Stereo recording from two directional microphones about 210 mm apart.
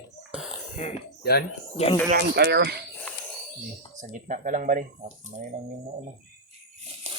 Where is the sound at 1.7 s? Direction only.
30° left (ahead or behind).